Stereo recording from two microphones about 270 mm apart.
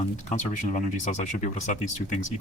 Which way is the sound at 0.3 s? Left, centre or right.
Left.